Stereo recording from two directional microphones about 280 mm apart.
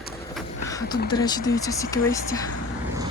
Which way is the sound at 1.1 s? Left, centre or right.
Centre.